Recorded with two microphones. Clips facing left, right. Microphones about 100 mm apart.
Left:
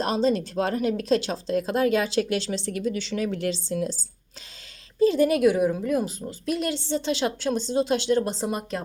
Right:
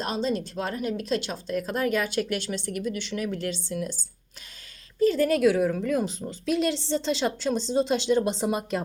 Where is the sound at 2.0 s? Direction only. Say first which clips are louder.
Left 3 dB; 90° left.